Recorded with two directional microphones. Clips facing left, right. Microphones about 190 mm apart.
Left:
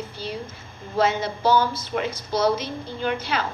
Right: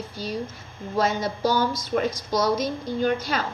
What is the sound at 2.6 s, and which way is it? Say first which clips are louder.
Speech: right 4 dB; 45° right (ahead or behind).